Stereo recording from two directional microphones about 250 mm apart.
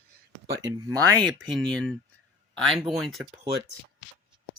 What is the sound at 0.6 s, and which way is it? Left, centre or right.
Speech, centre.